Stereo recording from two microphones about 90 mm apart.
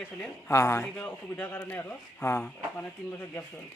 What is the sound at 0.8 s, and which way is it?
Speech, 15° left (ahead or behind).